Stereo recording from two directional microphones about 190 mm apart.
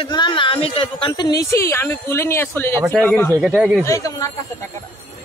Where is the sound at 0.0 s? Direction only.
25° left (ahead or behind).